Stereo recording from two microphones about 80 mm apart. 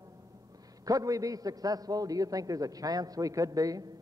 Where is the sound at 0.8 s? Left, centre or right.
Right.